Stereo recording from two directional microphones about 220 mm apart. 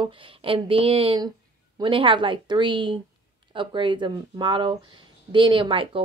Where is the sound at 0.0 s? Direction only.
25° right (ahead or behind).